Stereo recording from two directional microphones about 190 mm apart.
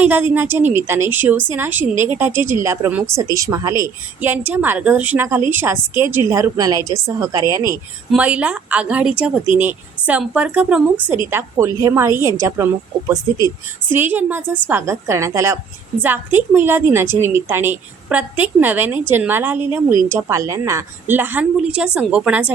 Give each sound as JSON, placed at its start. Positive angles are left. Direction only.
{"t": 0.0, "sound": "a woman's voice", "side_deg": -10}
{"t": 8.1, "sound": "a woman's voice", "side_deg": -5}